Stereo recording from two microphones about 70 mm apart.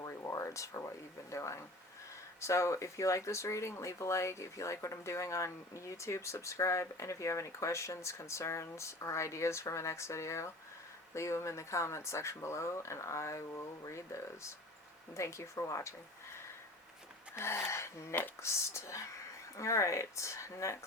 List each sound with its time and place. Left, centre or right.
0.0 s speech: left
17.3 s speech: left